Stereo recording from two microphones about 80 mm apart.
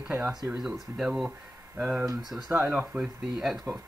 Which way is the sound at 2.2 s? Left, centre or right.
Centre.